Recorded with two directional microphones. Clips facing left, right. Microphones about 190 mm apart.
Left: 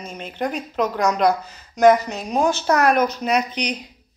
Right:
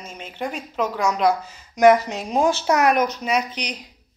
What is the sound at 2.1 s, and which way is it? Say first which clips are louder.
A woman's voice: even; 25° right (ahead or behind).